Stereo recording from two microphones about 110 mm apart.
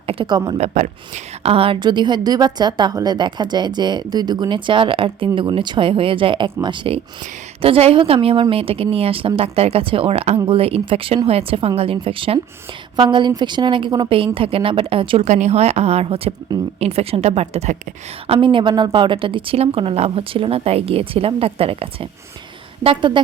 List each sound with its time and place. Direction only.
0.3 s speech: 40° right (ahead or behind)
0.6 s a woman's voice: 90° right; by 7.0 s 50° right (ahead or behind)
7.6 s a woman's voice: 60° right (ahead or behind)
15.2 s a woman's voice: 90° right
18.3 s a woman's voice: 50° right (ahead or behind)